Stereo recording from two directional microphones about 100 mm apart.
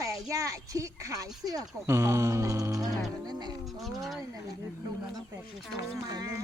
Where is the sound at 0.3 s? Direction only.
35° right (ahead or behind).